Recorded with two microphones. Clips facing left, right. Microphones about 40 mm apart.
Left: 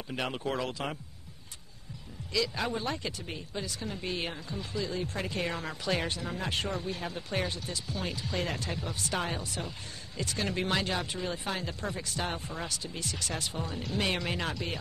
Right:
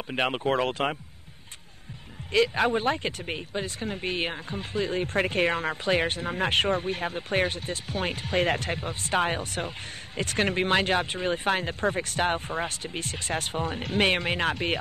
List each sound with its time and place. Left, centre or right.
0.1 s speech: right
2.3 s speech: right